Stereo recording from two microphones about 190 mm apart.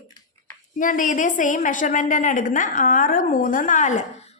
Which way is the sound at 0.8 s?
45° left (ahead or behind).